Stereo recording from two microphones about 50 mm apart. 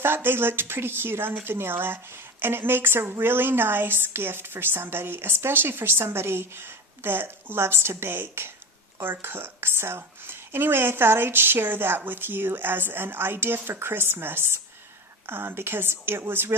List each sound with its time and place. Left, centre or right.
0.0 s speech: right